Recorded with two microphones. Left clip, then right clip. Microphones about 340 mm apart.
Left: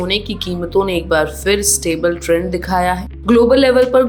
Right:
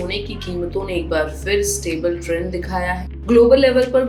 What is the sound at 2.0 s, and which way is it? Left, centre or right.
A woman's voice, left.